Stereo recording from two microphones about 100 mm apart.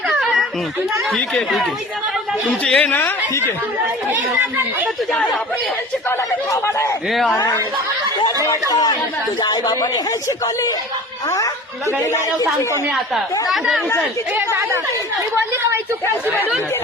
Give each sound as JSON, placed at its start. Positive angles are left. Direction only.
{"t": 0.2, "sound": "a sound", "side_deg": 0}
{"t": 1.1, "sound": "speech", "side_deg": 5}
{"t": 2.6, "sound": "speech", "side_deg": 10}
{"t": 2.9, "sound": "speech", "side_deg": 20}
{"t": 4.4, "sound": "speech", "side_deg": -25}
{"t": 6.1, "sound": "speech", "side_deg": 30}
{"t": 7.1, "sound": "speech", "side_deg": 0}
{"t": 9.4, "sound": "speech", "side_deg": 40}
{"t": 13.5, "sound": "speech", "side_deg": 0}
{"t": 14.3, "sound": "speech", "side_deg": -25}